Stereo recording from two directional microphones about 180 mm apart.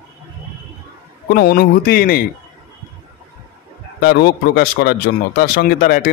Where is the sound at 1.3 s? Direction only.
60° left (ahead or behind).